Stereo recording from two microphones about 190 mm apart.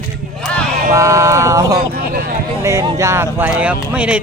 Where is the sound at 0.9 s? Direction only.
15° right (ahead or behind).